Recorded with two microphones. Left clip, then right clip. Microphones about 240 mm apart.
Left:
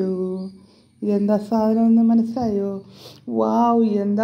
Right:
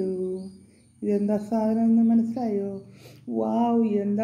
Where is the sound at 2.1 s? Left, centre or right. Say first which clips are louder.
Left 4 dB; left.